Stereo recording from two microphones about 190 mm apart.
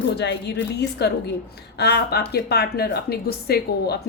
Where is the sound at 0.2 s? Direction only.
60° left (ahead or behind).